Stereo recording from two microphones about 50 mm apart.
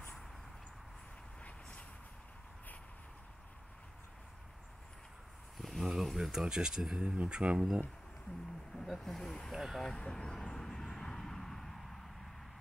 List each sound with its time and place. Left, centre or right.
1.4 s vehicle: left
5.6 s a sound: centre
5.9 s speech: centre
8.7 s speech: centre
9.5 s speech: centre
9.8 s vehicle: centre